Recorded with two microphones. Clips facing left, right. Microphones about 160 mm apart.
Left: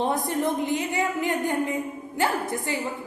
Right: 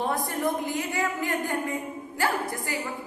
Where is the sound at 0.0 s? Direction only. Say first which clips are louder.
Left 3 dB; 20° left (ahead or behind).